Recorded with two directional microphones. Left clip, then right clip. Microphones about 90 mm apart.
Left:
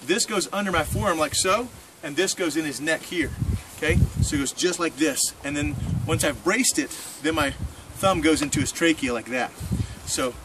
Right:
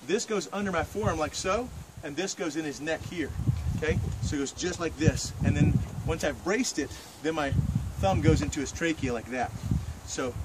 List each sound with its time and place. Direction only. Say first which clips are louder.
0.0 s speech: left 5 dB; 25° right (ahead or behind)